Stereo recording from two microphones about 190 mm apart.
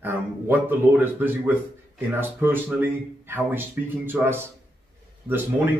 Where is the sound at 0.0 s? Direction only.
10° right (ahead or behind).